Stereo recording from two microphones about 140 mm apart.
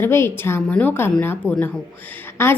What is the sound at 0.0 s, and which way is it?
A woman's voice, 15° left (ahead or behind).